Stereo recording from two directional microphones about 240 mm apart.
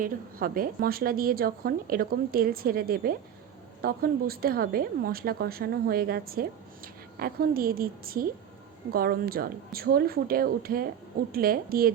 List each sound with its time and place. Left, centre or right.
0.0 s a woman's voice: right